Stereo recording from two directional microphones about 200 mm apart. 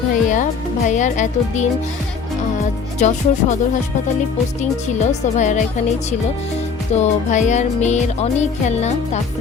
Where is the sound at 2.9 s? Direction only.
35° left (ahead or behind).